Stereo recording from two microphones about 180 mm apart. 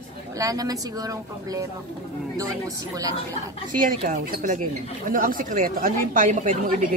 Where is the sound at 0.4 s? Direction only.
20° right (ahead or behind).